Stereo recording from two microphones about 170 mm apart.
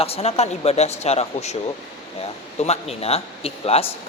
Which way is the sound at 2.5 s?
40° left (ahead or behind).